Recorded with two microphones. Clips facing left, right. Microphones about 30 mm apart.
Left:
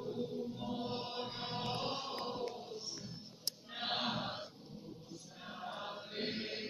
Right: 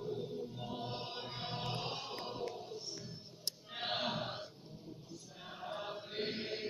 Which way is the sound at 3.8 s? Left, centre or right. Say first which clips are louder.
Even; centre.